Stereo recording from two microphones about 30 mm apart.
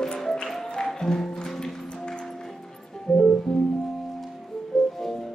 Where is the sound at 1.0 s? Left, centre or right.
Centre.